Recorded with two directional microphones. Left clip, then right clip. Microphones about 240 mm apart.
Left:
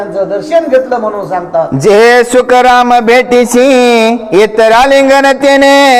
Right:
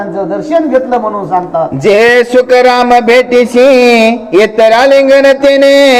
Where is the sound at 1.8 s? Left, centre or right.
Left.